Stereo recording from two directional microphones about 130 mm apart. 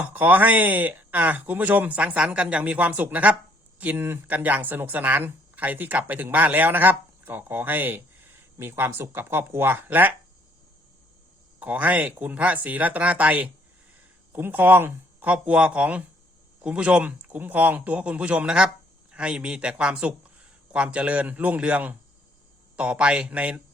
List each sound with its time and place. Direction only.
0.0 s speech: 15° right (ahead or behind)
11.6 s speech: 10° right (ahead or behind)